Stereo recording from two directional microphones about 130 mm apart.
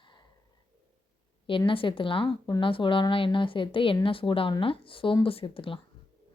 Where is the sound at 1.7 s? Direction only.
40° left (ahead or behind).